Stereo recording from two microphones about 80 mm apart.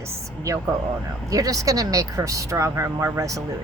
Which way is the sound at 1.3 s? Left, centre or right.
Right.